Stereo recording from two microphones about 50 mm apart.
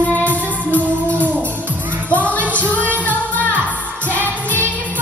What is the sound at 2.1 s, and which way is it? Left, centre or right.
Music, left.